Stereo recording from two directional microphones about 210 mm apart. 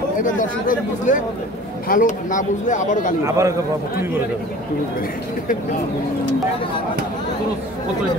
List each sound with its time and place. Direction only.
0.2 s speech: 40° left (ahead or behind)
3.3 s a man's voice: 15° right (ahead or behind)